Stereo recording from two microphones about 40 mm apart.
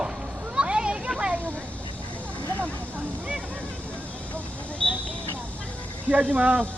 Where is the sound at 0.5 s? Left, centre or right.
Right.